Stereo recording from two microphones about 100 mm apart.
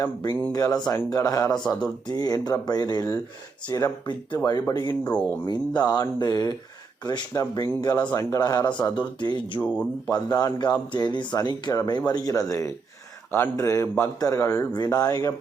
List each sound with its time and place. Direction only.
0.0 s speech: 40° left (ahead or behind)
5.0 s speech: 15° left (ahead or behind)
5.5 s speech: 45° left (ahead or behind)
9.6 s speech: 10° left (ahead or behind)
10.1 s a man's voice: 40° left (ahead or behind)